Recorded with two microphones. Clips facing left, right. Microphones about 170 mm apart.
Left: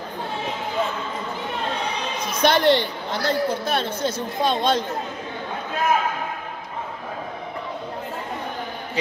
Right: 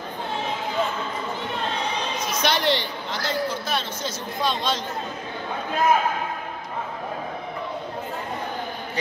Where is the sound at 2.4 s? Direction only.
55° left (ahead or behind).